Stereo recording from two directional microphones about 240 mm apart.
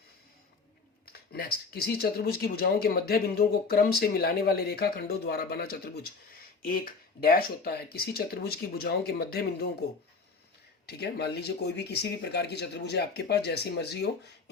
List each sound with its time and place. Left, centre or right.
1.1 s speech: left
10.8 s speech: left